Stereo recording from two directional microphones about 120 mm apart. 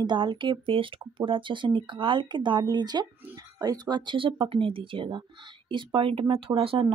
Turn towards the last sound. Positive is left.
turn(degrees=-50)  # may be behind; listen again after turning